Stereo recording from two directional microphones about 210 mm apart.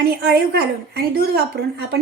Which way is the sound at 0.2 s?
50° right (ahead or behind).